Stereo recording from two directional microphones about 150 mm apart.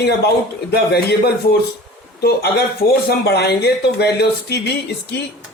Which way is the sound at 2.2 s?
90° left.